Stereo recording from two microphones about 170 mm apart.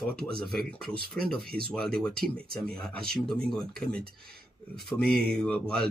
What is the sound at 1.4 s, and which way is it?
Speech, 65° right (ahead or behind).